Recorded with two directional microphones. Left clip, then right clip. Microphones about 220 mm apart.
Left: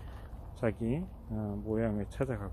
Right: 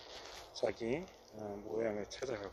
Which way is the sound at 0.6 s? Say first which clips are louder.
Left 2 dB; centre (ahead or behind).